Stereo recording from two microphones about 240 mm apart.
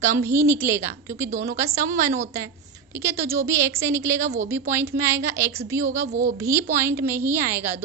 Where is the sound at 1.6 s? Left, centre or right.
Centre.